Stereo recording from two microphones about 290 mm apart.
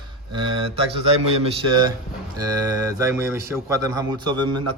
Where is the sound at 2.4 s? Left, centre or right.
Centre.